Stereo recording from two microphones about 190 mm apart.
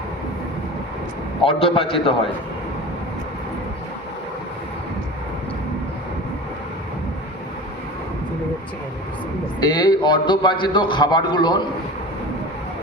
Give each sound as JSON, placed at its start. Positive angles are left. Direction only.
{"t": 1.5, "sound": "a man's voice", "side_deg": 30}
{"t": 9.6, "sound": "a man's voice", "side_deg": 20}